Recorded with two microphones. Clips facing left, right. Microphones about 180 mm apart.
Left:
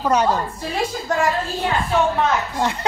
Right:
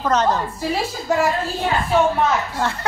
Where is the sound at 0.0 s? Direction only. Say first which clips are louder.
Even; 10° left (ahead or behind).